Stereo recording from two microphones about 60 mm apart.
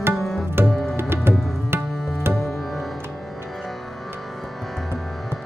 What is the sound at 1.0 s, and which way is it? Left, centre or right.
Music, right.